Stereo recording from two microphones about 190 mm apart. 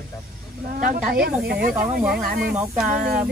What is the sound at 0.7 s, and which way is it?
A woman's voice, 50° right (ahead or behind).